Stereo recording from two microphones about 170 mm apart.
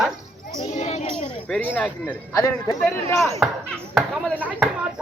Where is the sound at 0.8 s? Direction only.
40° left (ahead or behind).